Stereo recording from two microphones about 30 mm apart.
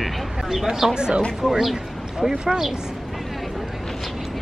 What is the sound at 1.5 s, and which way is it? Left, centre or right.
Speech, centre.